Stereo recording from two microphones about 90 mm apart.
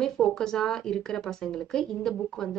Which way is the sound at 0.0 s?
5° left (ahead or behind).